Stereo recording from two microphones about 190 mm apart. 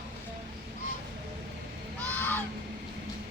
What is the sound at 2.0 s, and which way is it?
Honk, 10° left (ahead or behind).